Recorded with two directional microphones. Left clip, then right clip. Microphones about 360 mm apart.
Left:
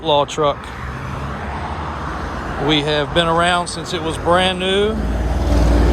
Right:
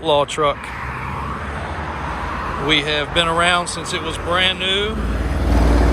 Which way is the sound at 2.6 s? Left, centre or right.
Centre.